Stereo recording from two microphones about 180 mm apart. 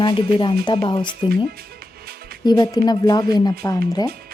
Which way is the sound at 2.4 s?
20° left (ahead or behind).